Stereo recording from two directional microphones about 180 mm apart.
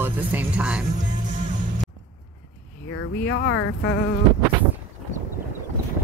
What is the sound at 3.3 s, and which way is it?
Speech, 90° left.